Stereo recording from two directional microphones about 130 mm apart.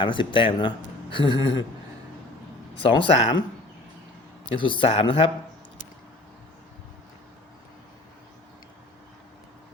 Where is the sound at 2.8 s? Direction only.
40° left (ahead or behind).